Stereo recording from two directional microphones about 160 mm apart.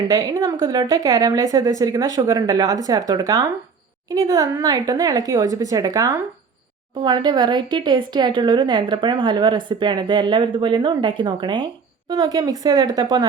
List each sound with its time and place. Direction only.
0.1 s a woman's voice: 20° right (ahead or behind)